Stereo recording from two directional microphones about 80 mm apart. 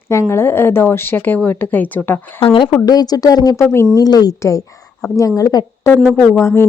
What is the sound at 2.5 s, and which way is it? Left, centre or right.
Speech, left.